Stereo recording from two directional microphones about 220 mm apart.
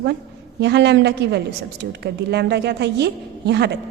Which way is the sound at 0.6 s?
50° right (ahead or behind).